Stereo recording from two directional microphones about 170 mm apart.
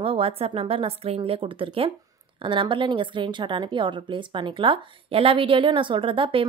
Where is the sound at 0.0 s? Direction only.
35° right (ahead or behind).